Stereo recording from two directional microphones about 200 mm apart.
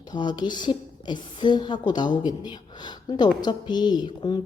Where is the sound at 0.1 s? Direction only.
20° left (ahead or behind).